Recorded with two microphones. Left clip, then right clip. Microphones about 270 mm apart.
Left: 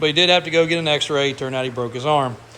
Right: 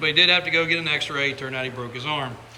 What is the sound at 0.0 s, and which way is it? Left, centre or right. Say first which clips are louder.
A man's voice: left 2 dB; centre.